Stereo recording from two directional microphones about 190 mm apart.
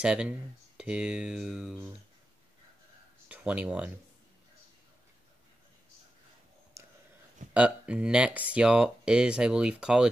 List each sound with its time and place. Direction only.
0.0 s speech: 5° right (ahead or behind)
3.3 s speech: 5° right (ahead or behind)
6.8 s a sound: 15° right (ahead or behind)
7.5 s speech: 5° right (ahead or behind)